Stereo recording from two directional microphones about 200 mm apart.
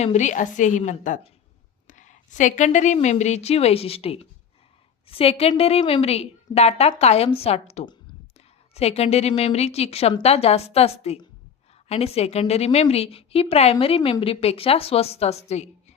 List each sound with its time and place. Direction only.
0.0 s a woman's voice: 35° left (ahead or behind)